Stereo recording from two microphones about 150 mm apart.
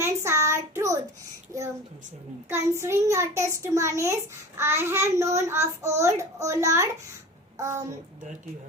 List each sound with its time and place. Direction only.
0.0 s child singing: 20° right (ahead or behind)
1.5 s a child's voice: 20° right (ahead or behind)